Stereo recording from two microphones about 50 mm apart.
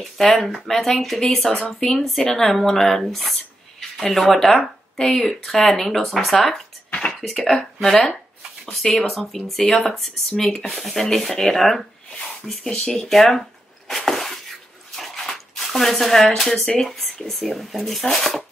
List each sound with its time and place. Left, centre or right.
0.7 s speech: centre
6.9 s a sound: left
7.2 s speech: centre
13.1 s speech: centre
13.8 s glass: centre
15.0 s a sound: centre
16.8 s speech: centre